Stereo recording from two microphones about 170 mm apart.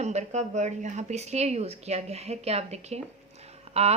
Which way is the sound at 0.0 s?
40° right (ahead or behind).